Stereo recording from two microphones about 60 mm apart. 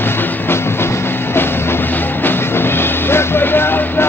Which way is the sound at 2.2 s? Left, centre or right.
Left.